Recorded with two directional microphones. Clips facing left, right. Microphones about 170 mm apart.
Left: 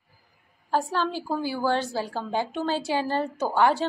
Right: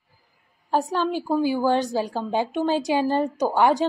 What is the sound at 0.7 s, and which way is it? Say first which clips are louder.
A woman's voice: right 3 dB; 15° right (ahead or behind).